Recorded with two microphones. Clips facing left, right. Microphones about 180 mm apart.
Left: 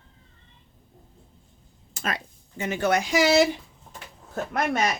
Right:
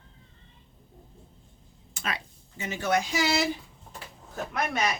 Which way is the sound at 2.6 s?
65° left (ahead or behind).